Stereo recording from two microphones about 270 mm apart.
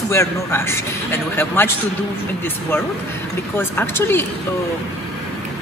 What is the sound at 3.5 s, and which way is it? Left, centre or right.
Speech, centre.